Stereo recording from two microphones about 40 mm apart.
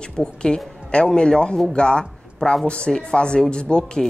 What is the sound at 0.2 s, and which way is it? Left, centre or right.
A woman's voice, left.